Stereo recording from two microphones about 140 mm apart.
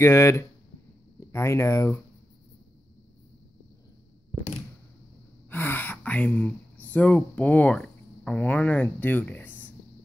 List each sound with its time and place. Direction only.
0.0 s speech: 20° left (ahead or behind)
5.5 s speech: 15° left (ahead or behind)